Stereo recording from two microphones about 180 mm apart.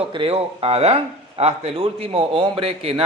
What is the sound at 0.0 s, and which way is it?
A man's voice, 30° right (ahead or behind).